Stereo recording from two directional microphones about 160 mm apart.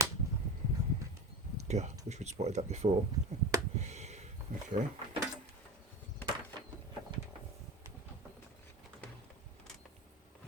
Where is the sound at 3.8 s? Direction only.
45° right (ahead or behind).